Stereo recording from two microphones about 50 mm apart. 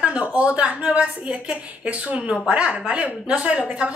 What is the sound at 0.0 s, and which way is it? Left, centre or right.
A woman's voice, right.